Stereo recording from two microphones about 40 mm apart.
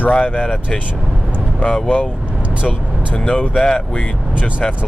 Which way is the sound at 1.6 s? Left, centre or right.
Left.